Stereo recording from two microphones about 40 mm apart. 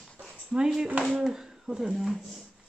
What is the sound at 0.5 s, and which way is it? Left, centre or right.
Speech, centre.